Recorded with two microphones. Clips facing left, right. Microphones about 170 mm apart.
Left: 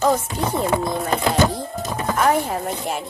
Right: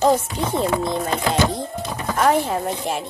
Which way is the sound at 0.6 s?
25° right (ahead or behind).